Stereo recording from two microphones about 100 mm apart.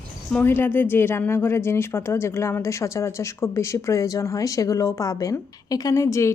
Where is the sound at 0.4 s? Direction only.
20° left (ahead or behind).